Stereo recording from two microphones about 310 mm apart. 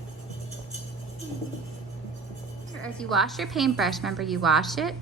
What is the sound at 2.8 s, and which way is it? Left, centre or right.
A woman's voice, centre.